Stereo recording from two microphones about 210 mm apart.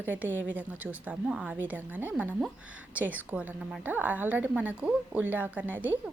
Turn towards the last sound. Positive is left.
turn(degrees=-10)  # may be behind; listen again after turning